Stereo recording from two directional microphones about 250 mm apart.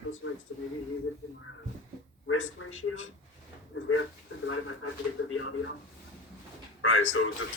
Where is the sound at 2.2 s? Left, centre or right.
Left.